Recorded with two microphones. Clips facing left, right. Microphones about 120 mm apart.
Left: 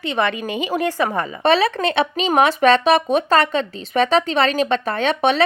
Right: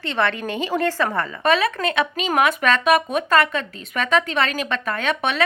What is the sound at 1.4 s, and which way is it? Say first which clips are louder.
Speech: left 3 dB; 30° left (ahead or behind).